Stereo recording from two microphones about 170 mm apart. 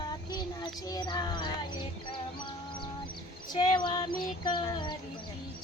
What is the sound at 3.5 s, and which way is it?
Speech, 25° left (ahead or behind).